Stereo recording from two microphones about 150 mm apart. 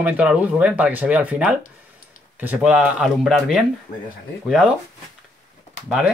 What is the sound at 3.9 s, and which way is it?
Speech, 65° left (ahead or behind).